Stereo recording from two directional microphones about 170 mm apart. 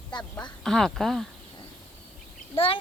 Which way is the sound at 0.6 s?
Centre (ahead or behind).